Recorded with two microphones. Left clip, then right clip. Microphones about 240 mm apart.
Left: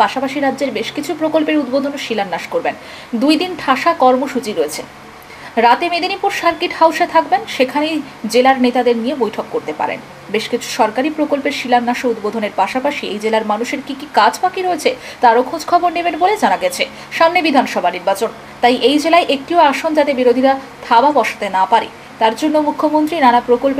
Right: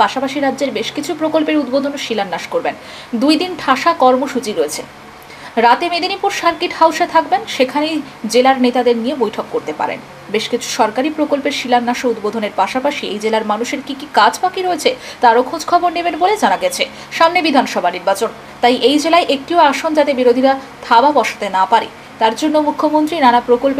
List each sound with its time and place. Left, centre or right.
0.0 s a woman's voice: centre
1.6 s speech: right
2.0 s a woman's voice: centre
9.2 s speech: right
9.8 s a woman's voice: centre
22.6 s speech: right
23.0 s a woman's voice: centre